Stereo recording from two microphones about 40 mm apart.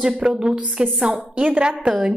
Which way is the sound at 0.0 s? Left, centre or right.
Centre.